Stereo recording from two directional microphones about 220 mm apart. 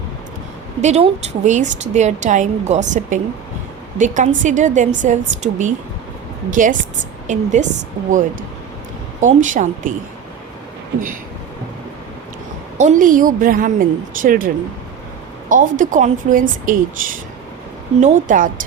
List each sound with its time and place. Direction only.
0.8 s a woman's voice: 30° right (ahead or behind)
9.2 s a woman's voice: 35° right (ahead or behind)
12.8 s a woman's voice: 35° right (ahead or behind)